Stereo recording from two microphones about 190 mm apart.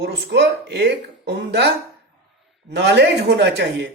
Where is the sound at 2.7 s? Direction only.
60° right (ahead or behind).